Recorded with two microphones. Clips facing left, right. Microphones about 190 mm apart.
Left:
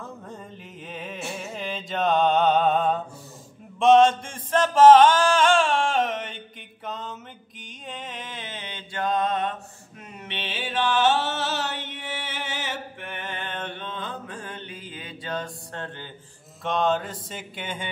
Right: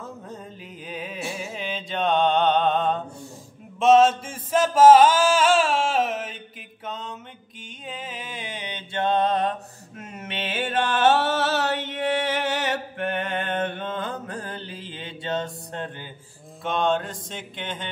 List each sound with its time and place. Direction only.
0.8 s music: centre (ahead or behind)
3.8 s chant: 5° right (ahead or behind)
6.9 s mantra: centre (ahead or behind); by 9.6 s 35° right (ahead or behind)
9.9 s a sound: 50° right (ahead or behind); by 16.1 s 15° right (ahead or behind)
16.6 s mantra: centre (ahead or behind)